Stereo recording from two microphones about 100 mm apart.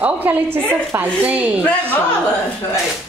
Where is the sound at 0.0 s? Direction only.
15° right (ahead or behind).